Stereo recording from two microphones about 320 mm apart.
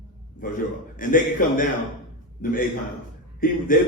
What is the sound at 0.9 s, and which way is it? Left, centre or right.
A man's voice, left.